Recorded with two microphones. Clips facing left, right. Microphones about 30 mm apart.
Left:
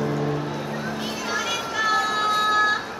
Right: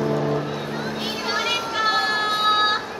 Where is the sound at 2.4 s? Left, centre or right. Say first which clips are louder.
Right 2 dB; right.